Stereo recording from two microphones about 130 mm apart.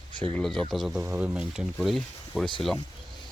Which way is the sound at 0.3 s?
5° left (ahead or behind).